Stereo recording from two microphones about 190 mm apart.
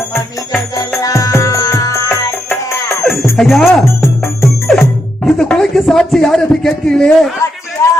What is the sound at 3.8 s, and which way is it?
Music, 15° left (ahead or behind).